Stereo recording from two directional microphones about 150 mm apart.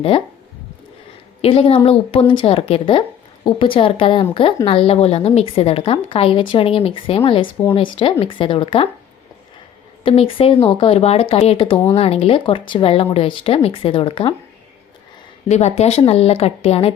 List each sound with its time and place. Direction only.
1.4 s a woman's voice: 40° left (ahead or behind)
10.0 s a woman's voice: 40° left (ahead or behind)
15.4 s speech: 50° left (ahead or behind)